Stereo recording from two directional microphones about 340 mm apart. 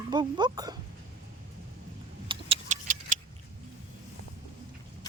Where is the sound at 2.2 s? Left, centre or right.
Centre.